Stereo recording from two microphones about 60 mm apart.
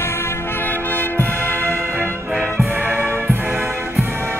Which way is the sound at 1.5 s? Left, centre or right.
Right.